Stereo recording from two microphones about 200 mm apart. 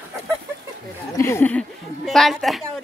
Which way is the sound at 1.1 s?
15° left (ahead or behind).